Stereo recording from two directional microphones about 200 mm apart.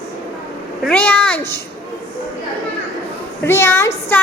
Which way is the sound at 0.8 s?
5° left (ahead or behind).